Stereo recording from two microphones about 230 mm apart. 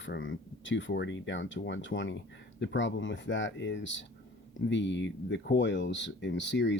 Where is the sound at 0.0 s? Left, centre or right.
Left.